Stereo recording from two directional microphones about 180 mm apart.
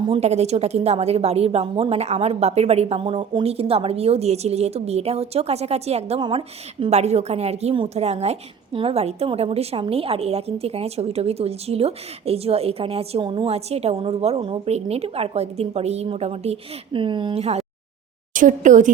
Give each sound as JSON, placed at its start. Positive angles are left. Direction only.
{"t": 0.1, "sound": "a woman's voice", "side_deg": -35}